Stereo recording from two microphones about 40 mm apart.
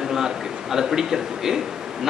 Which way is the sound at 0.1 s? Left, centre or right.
Centre.